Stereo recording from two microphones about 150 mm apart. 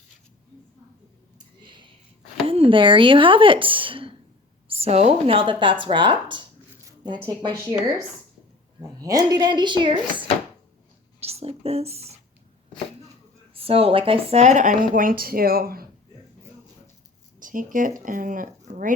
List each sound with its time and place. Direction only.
1.6 s a sound: 30° right (ahead or behind)
2.5 s speech: 35° right (ahead or behind)
8.8 s speech: 25° right (ahead or behind)
11.2 s a sound: 45° right (ahead or behind)
13.5 s speech: 40° right (ahead or behind); by 15.9 s 80° right
17.4 s speech: 65° right (ahead or behind)